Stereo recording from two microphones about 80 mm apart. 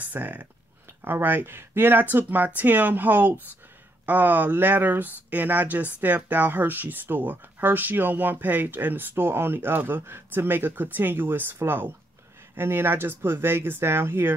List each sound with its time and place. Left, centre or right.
0.0 s speech: right